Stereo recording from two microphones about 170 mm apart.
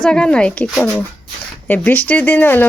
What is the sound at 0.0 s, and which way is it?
Speech, 5° left (ahead or behind).